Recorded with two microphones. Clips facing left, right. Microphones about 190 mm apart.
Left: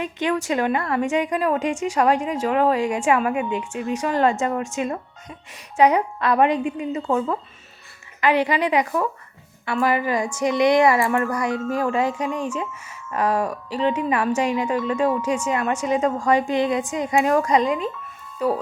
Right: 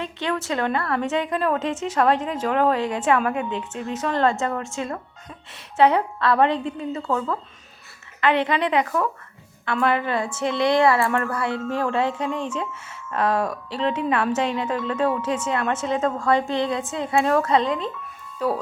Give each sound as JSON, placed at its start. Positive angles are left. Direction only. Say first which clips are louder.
{"t": 0.0, "sound": "a woman's voice", "louder": "left 3 dB", "side_deg": 15}